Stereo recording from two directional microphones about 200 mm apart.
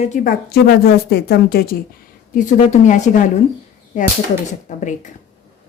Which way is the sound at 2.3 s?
40° left (ahead or behind).